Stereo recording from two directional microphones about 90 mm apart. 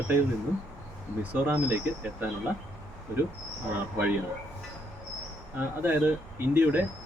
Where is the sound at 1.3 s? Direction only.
20° right (ahead or behind).